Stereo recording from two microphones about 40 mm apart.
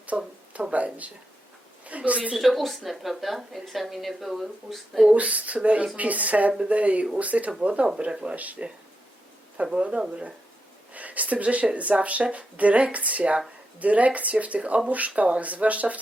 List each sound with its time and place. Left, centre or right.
0.1 s a sound: right
0.5 s speech: right
1.8 s a woman's voice: right
2.3 s a woman's voice: centre
5.1 s speech: right
8.4 s speech: right
9.7 s speech: right
10.9 s speech: right